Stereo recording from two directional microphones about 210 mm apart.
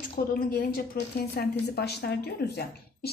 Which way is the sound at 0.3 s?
45° left (ahead or behind).